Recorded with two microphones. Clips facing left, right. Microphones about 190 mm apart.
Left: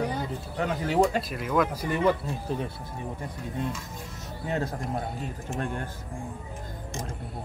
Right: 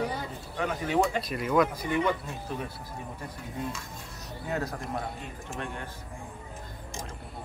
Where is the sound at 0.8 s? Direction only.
35° left (ahead or behind).